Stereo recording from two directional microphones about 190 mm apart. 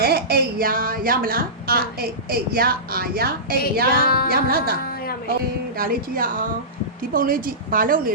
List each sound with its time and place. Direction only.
0.0 s a woman's voice: 55° right (ahead or behind)
3.9 s music: 55° left (ahead or behind)
4.3 s a woman's voice: 50° right (ahead or behind)